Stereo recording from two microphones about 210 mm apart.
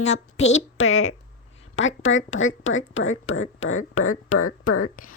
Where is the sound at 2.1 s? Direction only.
70° left (ahead or behind); by 4.9 s 90° left.